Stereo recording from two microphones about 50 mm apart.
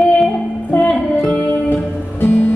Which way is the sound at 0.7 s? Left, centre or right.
Left.